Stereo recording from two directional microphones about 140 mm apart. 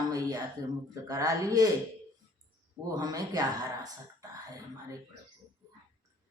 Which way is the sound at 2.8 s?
25° right (ahead or behind).